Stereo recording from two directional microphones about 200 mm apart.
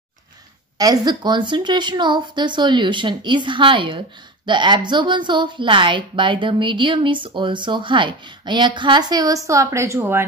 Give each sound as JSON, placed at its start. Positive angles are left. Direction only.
{"t": 0.7, "sound": "a woman's voice", "side_deg": -20}